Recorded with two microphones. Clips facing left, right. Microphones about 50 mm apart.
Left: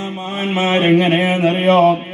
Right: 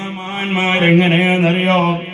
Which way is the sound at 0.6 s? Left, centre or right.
Right.